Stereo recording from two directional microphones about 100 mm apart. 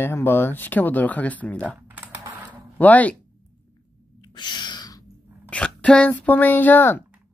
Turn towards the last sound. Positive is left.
turn(degrees=20)  # may be behind; listen again after turning